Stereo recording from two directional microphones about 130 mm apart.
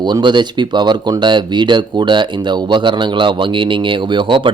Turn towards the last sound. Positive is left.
turn(degrees=-40)  # may be behind; listen again after turning